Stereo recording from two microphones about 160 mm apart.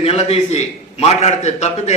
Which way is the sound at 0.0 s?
40° left (ahead or behind).